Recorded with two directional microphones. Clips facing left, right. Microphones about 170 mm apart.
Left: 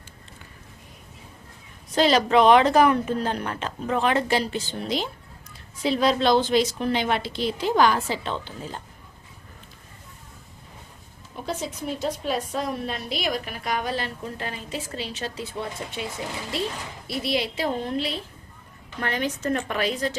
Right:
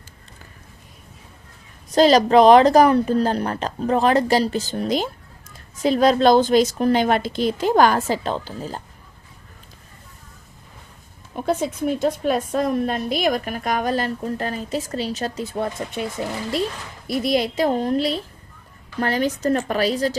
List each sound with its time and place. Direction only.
2.0 s a woman's voice: 40° right (ahead or behind)
11.3 s a woman's voice: 55° right (ahead or behind)
17.1 s a woman's voice: 45° right (ahead or behind)